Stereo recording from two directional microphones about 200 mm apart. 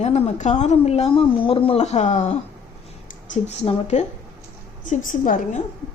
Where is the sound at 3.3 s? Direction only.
35° left (ahead or behind).